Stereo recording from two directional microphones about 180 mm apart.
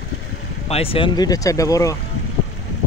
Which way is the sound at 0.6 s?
35° left (ahead or behind).